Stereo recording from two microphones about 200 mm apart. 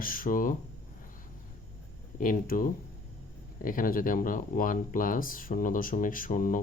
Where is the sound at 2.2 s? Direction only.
45° left (ahead or behind).